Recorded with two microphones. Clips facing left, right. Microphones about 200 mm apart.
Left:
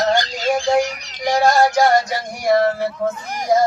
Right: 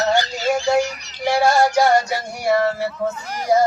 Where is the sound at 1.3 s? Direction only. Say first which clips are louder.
Left 1 dB; 10° right (ahead or behind).